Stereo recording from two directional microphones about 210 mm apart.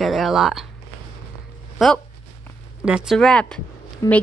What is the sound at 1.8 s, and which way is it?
A woman's voice, centre (ahead or behind).